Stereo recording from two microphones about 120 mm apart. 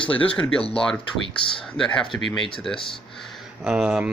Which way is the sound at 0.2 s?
10° left (ahead or behind).